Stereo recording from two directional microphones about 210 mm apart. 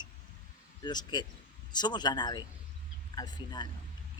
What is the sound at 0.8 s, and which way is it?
Speech, 20° left (ahead or behind).